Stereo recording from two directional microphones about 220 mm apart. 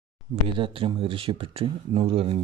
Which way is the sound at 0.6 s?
25° right (ahead or behind).